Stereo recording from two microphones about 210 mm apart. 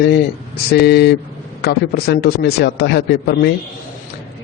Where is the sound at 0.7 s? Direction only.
50° left (ahead or behind).